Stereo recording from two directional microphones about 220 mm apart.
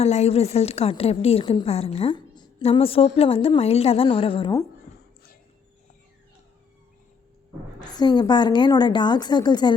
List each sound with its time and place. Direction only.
0.0 s a woman's voice: 30° left (ahead or behind)
7.9 s a woman's voice: 20° left (ahead or behind)